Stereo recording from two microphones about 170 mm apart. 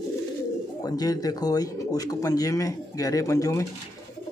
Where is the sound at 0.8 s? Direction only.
20° left (ahead or behind).